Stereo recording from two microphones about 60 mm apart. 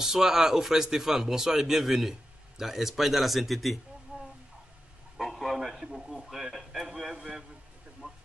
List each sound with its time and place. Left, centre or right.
0.0 s speech: centre
4.1 s fowl: right
5.1 s radio: centre
8.0 s a sound: centre